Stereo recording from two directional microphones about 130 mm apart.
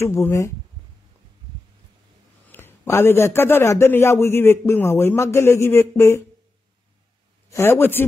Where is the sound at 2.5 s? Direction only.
15° left (ahead or behind).